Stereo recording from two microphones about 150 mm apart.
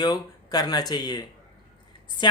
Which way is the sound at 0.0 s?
25° left (ahead or behind).